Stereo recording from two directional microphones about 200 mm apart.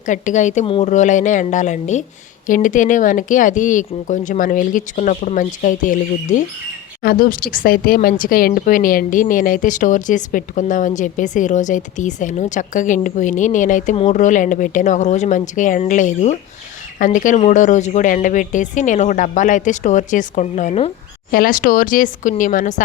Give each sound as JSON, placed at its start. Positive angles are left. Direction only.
{"t": 0.0, "sound": "speech", "side_deg": 40}
{"t": 0.6, "sound": "speech", "side_deg": 25}
{"t": 0.9, "sound": "speech", "side_deg": 35}
{"t": 21.2, "sound": "speech", "side_deg": 45}